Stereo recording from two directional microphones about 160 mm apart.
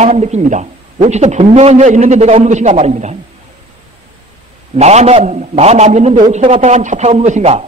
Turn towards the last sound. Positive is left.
turn(degrees=-40)  # may be behind; listen again after turning